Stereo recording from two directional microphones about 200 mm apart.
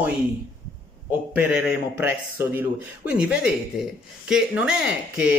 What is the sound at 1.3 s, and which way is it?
Speech, 10° right (ahead or behind).